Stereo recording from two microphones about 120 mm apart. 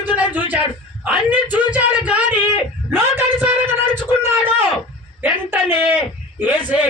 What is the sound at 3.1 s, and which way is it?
Music, 15° right (ahead or behind).